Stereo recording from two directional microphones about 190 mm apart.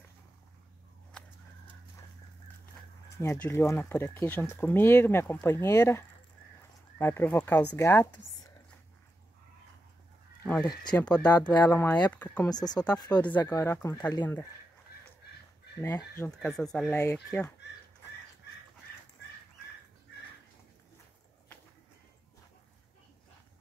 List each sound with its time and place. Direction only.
1.1 s a sound: 5° left (ahead or behind)
3.2 s speech: 15° left (ahead or behind)
10.4 s speech: 5° left (ahead or behind)
10.7 s speech: 20° left (ahead or behind)
11.0 s speech: 5° left (ahead or behind)
12.4 s speech: 20° left (ahead or behind)
15.8 s speech: 15° left (ahead or behind)
16.3 s speech: centre (ahead or behind)